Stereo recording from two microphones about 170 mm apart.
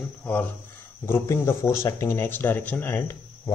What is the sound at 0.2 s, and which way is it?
Speech, 10° left (ahead or behind).